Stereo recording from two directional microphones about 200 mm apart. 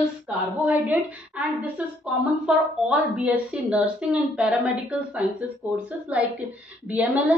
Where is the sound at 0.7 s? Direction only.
10° right (ahead or behind).